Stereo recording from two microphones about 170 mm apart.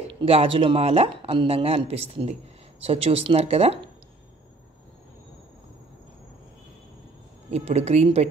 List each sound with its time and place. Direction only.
0.2 s speech: 35° right (ahead or behind)
7.5 s speech: 40° right (ahead or behind)